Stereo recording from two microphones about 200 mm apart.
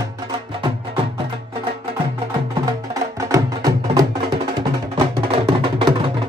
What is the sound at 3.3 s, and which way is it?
Music, 20° right (ahead or behind).